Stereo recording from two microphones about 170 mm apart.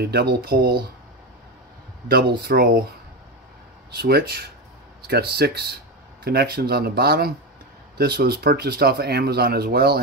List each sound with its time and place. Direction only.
0.0 s speech: 70° right (ahead or behind)
2.0 s speech: 65° right (ahead or behind)
3.9 s speech: 70° right (ahead or behind)